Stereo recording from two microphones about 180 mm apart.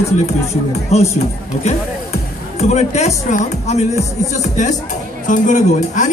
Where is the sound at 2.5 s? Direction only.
35° left (ahead or behind).